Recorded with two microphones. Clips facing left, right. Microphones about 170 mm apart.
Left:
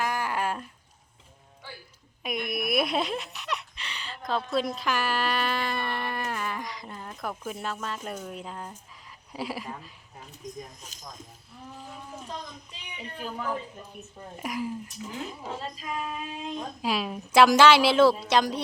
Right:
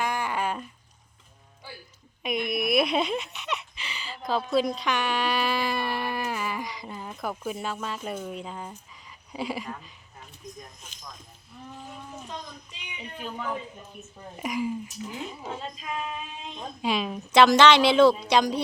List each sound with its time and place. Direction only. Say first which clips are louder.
0.0 s a sound: right 1 dB; centre (ahead or behind)
2.2 s speech: right 3 dB; centre (ahead or behind)
10.8 s speech: left 1 dB; 40° left (ahead or behind)
12.3 s a woman's voice: even; centre (ahead or behind)